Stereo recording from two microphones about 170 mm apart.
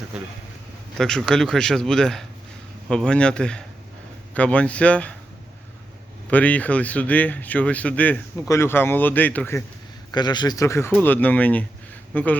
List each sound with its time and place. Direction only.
0.9 s speech: centre (ahead or behind)
6.3 s speech: 10° left (ahead or behind)
10.1 s speech: 25° left (ahead or behind)